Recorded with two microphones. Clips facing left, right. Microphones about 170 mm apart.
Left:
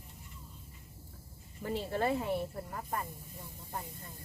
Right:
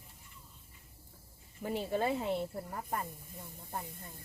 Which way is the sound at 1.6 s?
15° right (ahead or behind).